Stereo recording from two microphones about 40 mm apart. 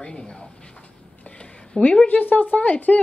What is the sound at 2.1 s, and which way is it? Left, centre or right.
Speech, left.